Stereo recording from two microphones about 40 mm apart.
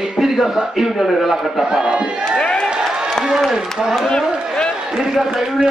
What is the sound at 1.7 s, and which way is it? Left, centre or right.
Speech, centre.